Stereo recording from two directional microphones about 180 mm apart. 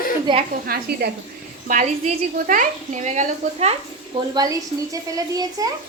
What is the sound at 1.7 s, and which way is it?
A woman's voice, 45° right (ahead or behind).